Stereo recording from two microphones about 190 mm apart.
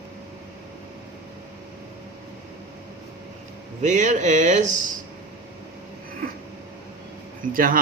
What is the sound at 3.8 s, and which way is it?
Speech, 40° right (ahead or behind).